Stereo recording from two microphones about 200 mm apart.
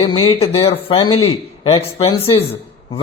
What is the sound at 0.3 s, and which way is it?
Speech, 30° left (ahead or behind).